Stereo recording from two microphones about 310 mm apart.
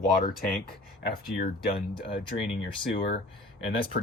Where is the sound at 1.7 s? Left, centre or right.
Centre.